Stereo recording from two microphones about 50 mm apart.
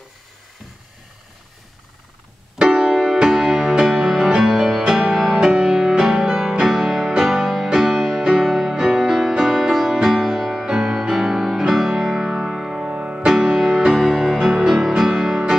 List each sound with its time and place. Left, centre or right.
2.6 s music: centre
3.7 s music: centre
12.9 s music: right
13.6 s music: centre
14.5 s music: centre